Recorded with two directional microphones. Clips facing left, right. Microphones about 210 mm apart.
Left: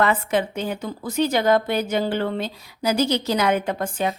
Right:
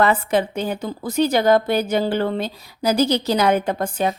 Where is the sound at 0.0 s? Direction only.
35° right (ahead or behind).